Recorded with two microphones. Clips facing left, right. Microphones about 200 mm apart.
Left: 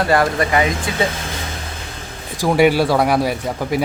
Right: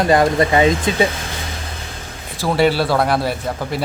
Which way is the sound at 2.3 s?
15° left (ahead or behind).